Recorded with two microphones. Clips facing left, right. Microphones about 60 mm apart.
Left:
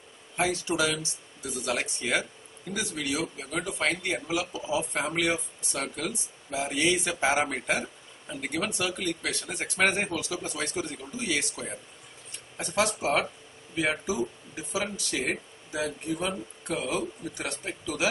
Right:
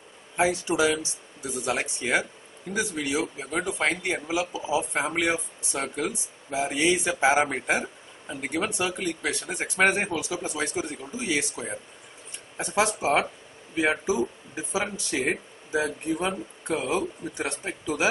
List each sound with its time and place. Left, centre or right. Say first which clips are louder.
0.4 s a man's voice: right 4 dB; centre